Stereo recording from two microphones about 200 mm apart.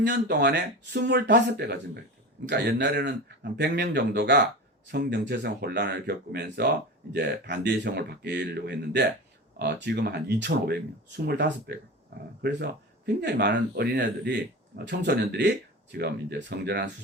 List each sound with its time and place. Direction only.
0.0 s speech: 55° right (ahead or behind)